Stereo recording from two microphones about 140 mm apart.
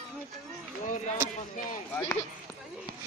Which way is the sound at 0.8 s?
60° left (ahead or behind).